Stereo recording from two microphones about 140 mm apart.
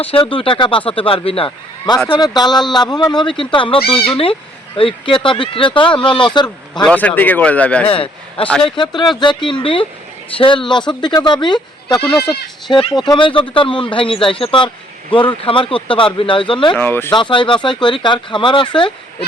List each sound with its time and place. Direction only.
0.0 s speech: 40° left (ahead or behind)
6.8 s speech: 10° left (ahead or behind)
7.9 s a man's voice: 40° left (ahead or behind)
8.4 s speech: 5° left (ahead or behind)
9.2 s speech: 35° left (ahead or behind)
16.7 s speech: 15° left (ahead or behind)
17.1 s speech: 35° left (ahead or behind)